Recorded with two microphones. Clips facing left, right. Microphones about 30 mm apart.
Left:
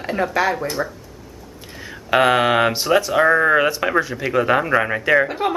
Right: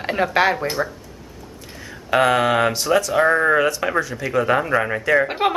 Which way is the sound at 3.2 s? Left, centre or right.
Centre.